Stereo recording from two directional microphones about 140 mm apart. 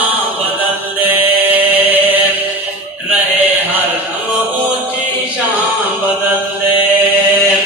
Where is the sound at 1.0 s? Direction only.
15° right (ahead or behind).